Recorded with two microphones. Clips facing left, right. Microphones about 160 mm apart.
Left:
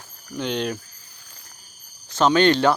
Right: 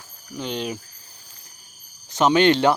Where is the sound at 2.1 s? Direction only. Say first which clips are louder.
Even; 15° right (ahead or behind).